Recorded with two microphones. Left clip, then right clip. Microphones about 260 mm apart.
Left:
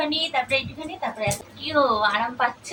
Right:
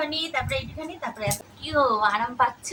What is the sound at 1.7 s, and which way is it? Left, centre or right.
Speech, centre.